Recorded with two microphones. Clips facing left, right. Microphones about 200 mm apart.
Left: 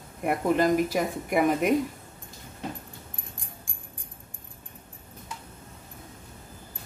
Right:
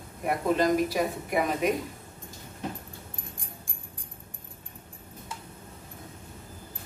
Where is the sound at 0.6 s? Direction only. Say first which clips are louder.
Left 1 dB; 50° left (ahead or behind).